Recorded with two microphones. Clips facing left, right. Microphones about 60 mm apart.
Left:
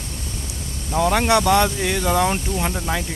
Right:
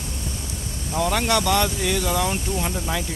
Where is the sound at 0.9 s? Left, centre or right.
Centre.